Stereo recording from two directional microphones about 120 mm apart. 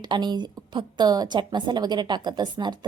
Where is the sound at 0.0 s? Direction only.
40° right (ahead or behind).